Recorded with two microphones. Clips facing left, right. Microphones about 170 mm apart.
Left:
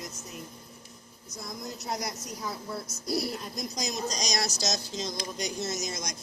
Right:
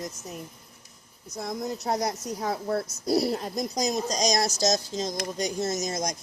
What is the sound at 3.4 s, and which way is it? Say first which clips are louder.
Speech: right 7 dB; 50° right (ahead or behind).